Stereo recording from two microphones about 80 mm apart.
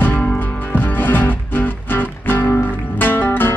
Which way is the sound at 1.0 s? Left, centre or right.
Left.